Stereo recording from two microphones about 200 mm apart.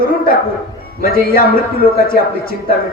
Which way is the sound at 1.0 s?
45° left (ahead or behind).